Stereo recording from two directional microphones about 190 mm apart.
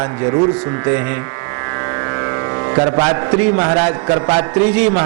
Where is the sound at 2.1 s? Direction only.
25° right (ahead or behind).